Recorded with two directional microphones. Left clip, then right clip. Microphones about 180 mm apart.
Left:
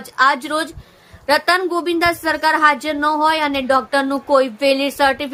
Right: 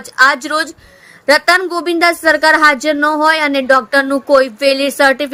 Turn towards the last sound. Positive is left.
turn(degrees=-20)  # may be behind; listen again after turning